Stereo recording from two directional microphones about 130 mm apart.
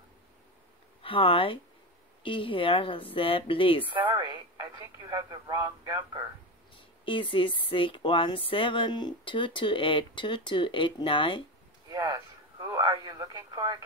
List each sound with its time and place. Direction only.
1.0 s speech: 40° left (ahead or behind)
4.6 s speech: 30° right (ahead or behind)
6.7 s speech: 40° left (ahead or behind)
11.9 s speech: 30° right (ahead or behind)